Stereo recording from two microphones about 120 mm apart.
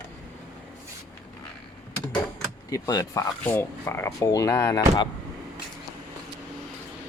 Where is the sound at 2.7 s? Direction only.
30° left (ahead or behind).